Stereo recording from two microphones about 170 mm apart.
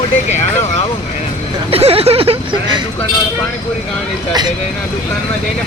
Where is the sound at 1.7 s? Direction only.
35° right (ahead or behind).